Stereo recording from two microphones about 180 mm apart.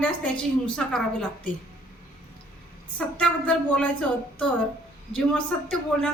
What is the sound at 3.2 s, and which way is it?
Speech, 5° left (ahead or behind).